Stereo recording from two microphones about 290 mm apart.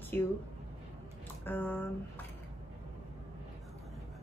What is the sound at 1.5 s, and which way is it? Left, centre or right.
Speech, centre.